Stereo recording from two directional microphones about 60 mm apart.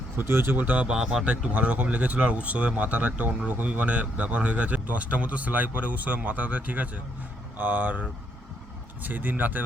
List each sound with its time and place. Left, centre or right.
0.2 s speech: right
0.6 s a man's voice: right
0.9 s speech: centre
1.2 s a man's voice: right
9.0 s a man's voice: right